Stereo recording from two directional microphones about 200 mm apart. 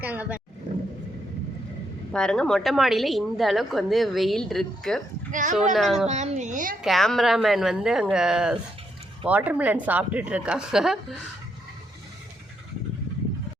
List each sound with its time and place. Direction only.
0.0 s speech: 10° right (ahead or behind)
2.1 s a woman's voice: 5° left (ahead or behind)
5.3 s a child's voice: 40° right (ahead or behind)
5.7 s a woman's voice: centre (ahead or behind)
6.1 s a child's voice: 35° right (ahead or behind)
6.8 s a woman's voice: centre (ahead or behind)